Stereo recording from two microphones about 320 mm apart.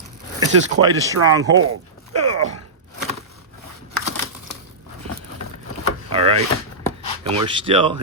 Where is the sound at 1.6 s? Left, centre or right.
Right.